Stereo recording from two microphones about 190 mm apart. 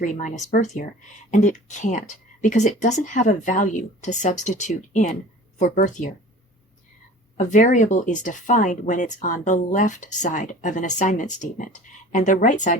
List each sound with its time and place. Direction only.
0.0 s speech: 40° left (ahead or behind)
7.3 s speech: 40° left (ahead or behind)